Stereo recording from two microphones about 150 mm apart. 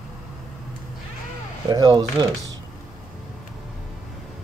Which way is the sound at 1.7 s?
30° right (ahead or behind).